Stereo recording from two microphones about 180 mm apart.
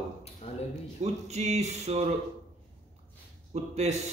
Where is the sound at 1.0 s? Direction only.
35° right (ahead or behind).